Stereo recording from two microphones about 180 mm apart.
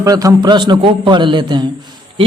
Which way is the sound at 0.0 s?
20° right (ahead or behind).